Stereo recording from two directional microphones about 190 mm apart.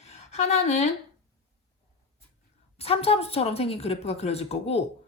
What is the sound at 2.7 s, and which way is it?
Speech, 30° left (ahead or behind).